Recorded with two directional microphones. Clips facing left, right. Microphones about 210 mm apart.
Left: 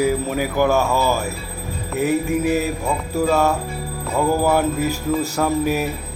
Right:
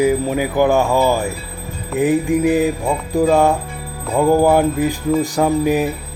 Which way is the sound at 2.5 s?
15° right (ahead or behind).